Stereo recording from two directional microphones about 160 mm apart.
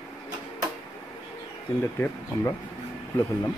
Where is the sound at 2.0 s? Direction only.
15° left (ahead or behind).